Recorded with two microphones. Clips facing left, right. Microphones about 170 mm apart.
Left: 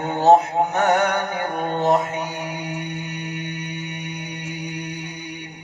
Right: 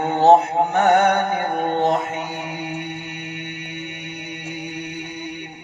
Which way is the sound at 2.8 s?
40° left (ahead or behind).